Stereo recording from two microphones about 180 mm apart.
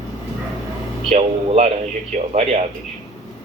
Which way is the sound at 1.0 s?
40° right (ahead or behind).